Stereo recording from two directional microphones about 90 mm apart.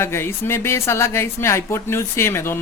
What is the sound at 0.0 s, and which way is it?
Speech, 25° left (ahead or behind).